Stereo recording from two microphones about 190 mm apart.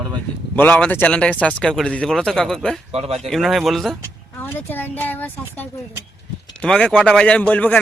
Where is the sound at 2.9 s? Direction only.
35° right (ahead or behind).